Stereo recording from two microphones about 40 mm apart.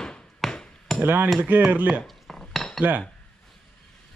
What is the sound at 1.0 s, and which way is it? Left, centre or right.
Hammer, right.